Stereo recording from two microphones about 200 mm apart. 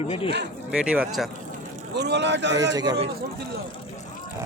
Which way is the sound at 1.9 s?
60° right (ahead or behind).